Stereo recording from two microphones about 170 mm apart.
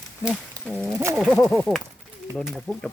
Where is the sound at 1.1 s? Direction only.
Centre (ahead or behind).